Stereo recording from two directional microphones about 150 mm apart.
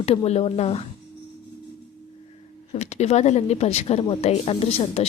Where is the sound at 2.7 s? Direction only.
45° left (ahead or behind).